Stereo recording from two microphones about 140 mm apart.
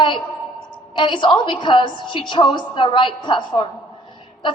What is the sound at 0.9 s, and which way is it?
A woman's voice, 35° left (ahead or behind).